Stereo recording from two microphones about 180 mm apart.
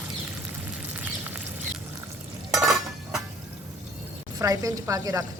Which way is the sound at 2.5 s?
Centre (ahead or behind).